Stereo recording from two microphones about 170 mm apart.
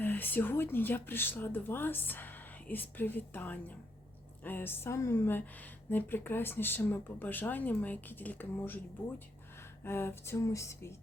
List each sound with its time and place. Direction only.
0.0 s speech: 10° left (ahead or behind)